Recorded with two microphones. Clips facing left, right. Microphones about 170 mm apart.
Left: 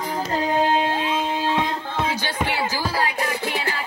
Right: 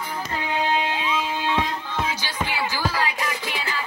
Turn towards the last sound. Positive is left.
turn(degrees=30)  # may be behind; listen again after turning